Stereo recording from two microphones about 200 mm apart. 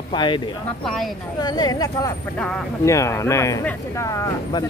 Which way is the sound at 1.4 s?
20° left (ahead or behind).